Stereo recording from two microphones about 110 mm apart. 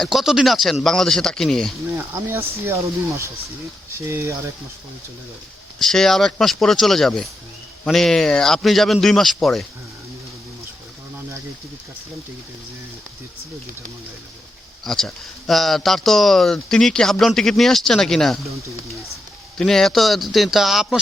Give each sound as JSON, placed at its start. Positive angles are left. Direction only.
{"t": 0.0, "sound": "speech", "side_deg": 0}
{"t": 2.0, "sound": "speech", "side_deg": -20}
{"t": 5.8, "sound": "speech", "side_deg": 5}
{"t": 14.8, "sound": "speech", "side_deg": 5}
{"t": 19.5, "sound": "speech", "side_deg": 5}